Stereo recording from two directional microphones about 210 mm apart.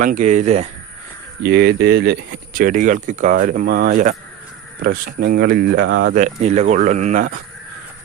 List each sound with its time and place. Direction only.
0.0 s speech: 35° right (ahead or behind)
1.4 s speech: 55° right (ahead or behind)
6.1 s speech: 35° right (ahead or behind)